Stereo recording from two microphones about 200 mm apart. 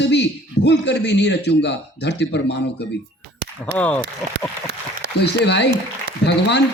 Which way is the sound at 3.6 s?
5° left (ahead or behind).